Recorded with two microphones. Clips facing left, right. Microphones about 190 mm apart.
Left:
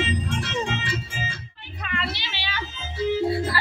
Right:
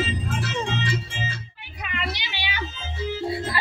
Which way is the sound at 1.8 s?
15° right (ahead or behind).